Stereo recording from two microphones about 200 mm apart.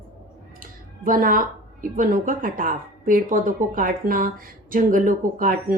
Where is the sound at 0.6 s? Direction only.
45° right (ahead or behind).